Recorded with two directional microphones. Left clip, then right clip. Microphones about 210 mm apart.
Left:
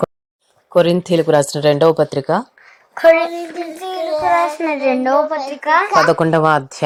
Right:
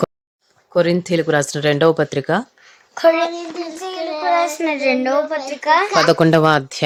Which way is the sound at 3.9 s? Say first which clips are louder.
Left 5 dB; 15° right (ahead or behind).